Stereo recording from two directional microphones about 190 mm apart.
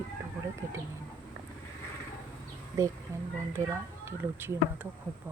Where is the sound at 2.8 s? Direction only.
15° right (ahead or behind).